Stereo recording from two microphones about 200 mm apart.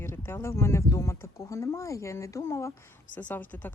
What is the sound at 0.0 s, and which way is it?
A woman's voice, 10° left (ahead or behind).